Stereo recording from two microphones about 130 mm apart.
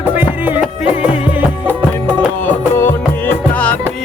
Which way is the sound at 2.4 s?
15° left (ahead or behind).